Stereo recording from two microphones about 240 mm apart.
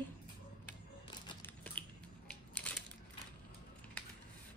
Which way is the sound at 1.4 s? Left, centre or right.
Centre.